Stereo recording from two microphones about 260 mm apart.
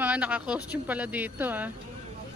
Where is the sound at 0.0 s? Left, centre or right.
Centre.